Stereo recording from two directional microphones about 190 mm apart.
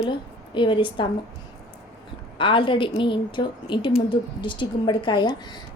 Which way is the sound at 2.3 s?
25° left (ahead or behind).